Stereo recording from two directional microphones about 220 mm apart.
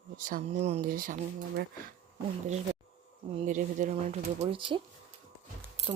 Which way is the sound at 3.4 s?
35° right (ahead or behind).